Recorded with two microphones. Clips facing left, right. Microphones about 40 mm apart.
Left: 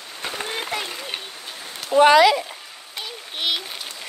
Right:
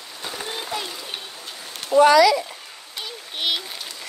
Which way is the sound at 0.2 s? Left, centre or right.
Left.